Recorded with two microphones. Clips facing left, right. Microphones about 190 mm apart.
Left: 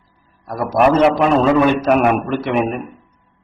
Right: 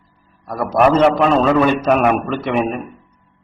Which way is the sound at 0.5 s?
10° left (ahead or behind).